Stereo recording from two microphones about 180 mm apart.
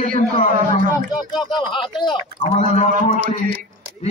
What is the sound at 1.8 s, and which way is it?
Speech, 25° left (ahead or behind).